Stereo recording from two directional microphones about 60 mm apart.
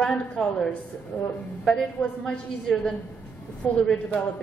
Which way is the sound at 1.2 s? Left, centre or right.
Left.